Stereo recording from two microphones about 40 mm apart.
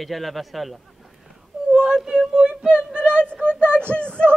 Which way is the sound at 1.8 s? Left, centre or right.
Centre.